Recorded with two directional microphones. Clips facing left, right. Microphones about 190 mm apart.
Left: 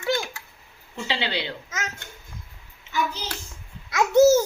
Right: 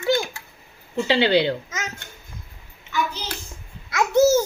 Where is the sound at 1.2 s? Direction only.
40° right (ahead or behind).